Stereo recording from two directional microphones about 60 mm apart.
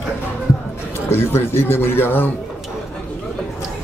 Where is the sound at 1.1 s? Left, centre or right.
Left.